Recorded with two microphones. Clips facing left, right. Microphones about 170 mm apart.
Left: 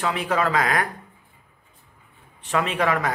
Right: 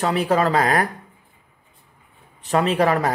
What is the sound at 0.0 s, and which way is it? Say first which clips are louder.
Speech: right 4 dB; 35° right (ahead or behind).